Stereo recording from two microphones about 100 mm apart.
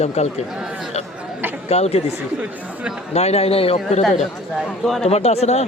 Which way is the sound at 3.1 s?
90° left.